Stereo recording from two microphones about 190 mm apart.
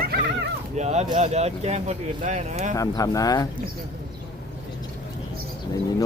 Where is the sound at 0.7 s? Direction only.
35° right (ahead or behind).